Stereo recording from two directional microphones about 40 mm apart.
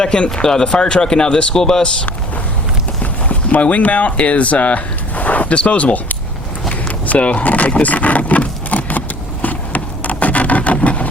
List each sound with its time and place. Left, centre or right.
0.0 s speech: left
3.0 s speech: left
7.1 s a sound: left